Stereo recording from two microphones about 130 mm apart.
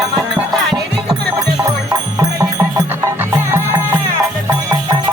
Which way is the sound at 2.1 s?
30° right (ahead or behind).